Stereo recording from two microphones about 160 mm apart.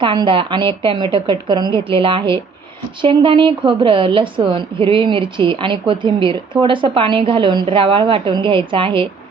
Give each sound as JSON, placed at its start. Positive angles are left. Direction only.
{"t": 0.0, "sound": "a woman's voice", "side_deg": -30}